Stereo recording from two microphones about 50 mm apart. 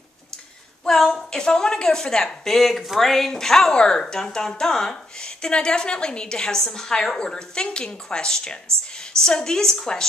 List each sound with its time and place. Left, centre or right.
0.8 s speech: centre